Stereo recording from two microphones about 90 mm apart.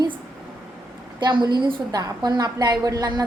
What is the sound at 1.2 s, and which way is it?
A woman's voice, 60° right (ahead or behind).